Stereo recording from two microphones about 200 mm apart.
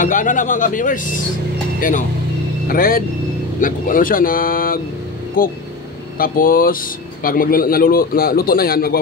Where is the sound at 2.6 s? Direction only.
45° left (ahead or behind).